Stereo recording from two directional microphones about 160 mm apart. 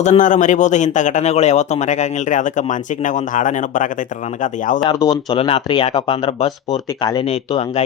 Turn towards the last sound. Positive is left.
turn(degrees=40)  # may be behind; listen again after turning